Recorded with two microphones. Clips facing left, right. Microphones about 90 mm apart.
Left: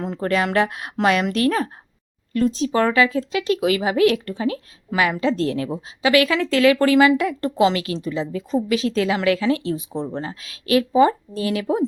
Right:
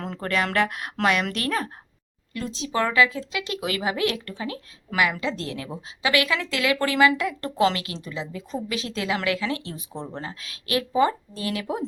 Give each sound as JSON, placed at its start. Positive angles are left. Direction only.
{"t": 0.0, "sound": "a woman's voice", "side_deg": 20}
{"t": 2.3, "sound": "a woman's voice", "side_deg": 45}